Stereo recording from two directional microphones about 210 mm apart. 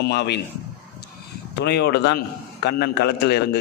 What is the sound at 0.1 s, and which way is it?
Speech, 55° left (ahead or behind).